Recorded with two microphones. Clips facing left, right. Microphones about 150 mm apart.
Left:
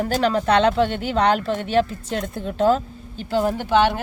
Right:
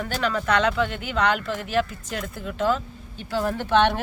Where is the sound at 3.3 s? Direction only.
25° left (ahead or behind).